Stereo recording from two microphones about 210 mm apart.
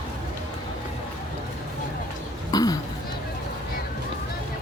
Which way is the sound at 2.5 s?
15° left (ahead or behind).